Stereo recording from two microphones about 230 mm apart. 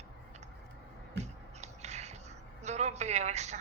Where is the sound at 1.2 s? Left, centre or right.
Right.